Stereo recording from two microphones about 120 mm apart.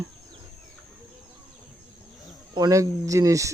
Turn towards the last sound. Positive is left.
turn(degrees=-25)  # may be behind; listen again after turning